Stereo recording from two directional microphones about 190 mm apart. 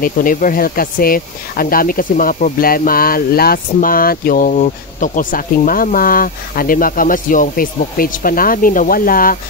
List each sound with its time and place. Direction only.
0.0 s speech: 45° left (ahead or behind)